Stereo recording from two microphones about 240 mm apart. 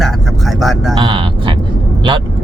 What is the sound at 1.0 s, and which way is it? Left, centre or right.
Speech, centre.